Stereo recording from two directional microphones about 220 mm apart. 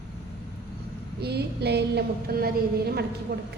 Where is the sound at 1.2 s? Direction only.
50° right (ahead or behind).